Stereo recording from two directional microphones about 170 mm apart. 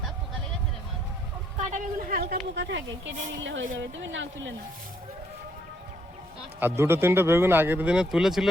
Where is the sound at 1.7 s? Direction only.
55° right (ahead or behind).